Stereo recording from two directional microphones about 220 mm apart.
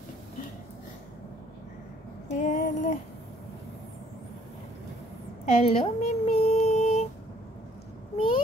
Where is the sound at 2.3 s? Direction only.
35° left (ahead or behind).